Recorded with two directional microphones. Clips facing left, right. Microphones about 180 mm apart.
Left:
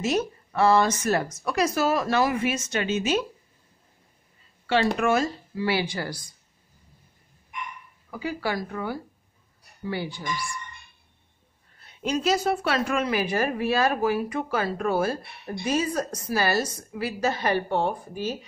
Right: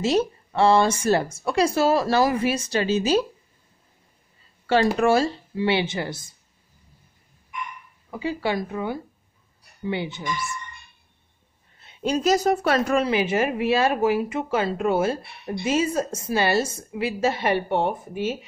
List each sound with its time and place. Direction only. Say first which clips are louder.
0.0 s a woman's voice: right 4 dB; 30° right (ahead or behind)
4.9 s a woman's voice: right 4 dB; 30° right (ahead or behind)
8.1 s a woman's voice: right 3 dB; 25° right (ahead or behind)
11.8 s a woman's voice: right 3 dB; 30° right (ahead or behind)